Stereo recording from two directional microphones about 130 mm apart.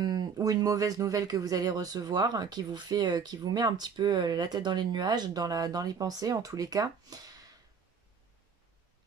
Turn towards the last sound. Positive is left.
turn(degrees=-30)  # may be behind; listen again after turning